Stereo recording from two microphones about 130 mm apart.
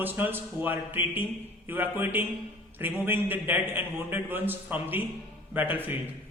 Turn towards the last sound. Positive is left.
turn(degrees=-15)  # may be behind; listen again after turning